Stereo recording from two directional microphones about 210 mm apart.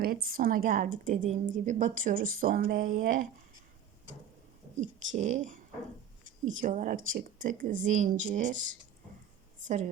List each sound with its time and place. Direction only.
0.0 s speech: 45° right (ahead or behind)
4.8 s speech: 35° right (ahead or behind)
6.6 s speech: 40° right (ahead or behind)